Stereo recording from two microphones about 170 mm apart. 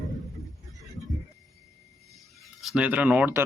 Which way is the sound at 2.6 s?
5° right (ahead or behind).